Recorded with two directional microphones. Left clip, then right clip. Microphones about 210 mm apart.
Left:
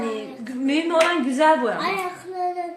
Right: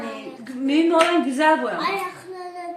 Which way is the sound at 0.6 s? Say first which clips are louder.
Right 2 dB; 30° left (ahead or behind).